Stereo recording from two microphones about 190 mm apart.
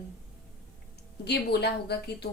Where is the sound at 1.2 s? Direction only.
60° left (ahead or behind).